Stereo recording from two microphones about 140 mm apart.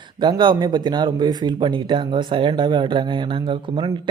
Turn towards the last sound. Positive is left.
turn(degrees=-40)  # may be behind; listen again after turning